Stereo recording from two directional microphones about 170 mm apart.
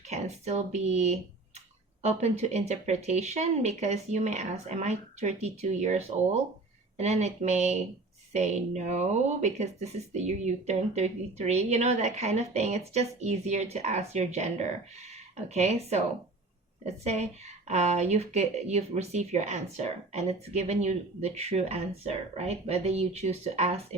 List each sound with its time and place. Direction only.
0.1 s speech: 40° right (ahead or behind)